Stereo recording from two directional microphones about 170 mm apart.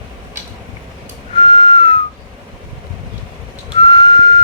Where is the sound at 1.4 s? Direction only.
30° left (ahead or behind).